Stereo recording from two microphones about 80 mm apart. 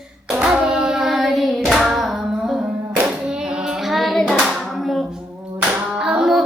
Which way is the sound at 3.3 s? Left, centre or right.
Centre.